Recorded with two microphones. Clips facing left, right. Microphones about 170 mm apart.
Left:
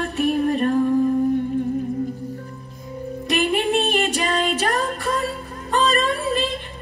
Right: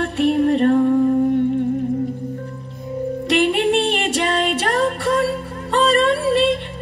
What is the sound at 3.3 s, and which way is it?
Music, 70° right (ahead or behind).